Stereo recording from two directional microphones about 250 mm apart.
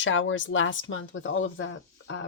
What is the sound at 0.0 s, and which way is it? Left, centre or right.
A woman's voice, left.